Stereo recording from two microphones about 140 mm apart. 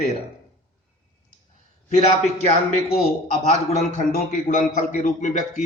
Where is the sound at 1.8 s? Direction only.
50° left (ahead or behind).